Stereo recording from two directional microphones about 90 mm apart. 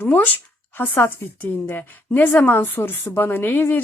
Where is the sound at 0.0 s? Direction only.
20° left (ahead or behind).